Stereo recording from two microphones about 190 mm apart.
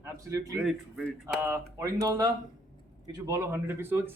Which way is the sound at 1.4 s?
15° right (ahead or behind).